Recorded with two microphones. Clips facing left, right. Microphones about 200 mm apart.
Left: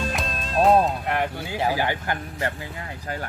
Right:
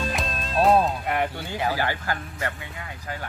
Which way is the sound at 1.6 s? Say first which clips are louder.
Left 2 dB; 15° left (ahead or behind).